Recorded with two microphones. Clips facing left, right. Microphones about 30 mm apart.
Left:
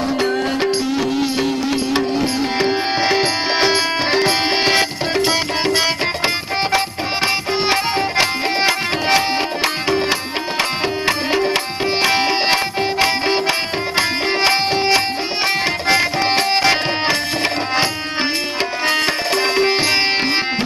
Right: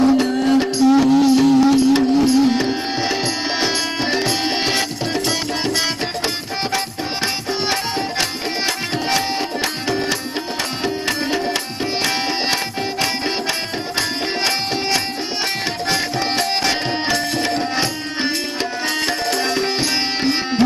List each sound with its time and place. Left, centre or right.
0.2 s music: centre
7.7 s music: left
13.9 s music: left
15.9 s tabla: left
18.9 s music: left